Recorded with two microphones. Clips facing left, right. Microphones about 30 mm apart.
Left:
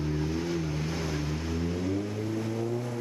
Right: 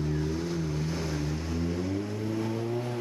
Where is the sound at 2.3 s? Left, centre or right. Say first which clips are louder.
Right 2 dB; right.